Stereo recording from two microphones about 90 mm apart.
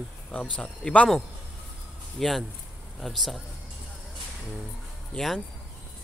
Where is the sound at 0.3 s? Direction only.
10° left (ahead or behind).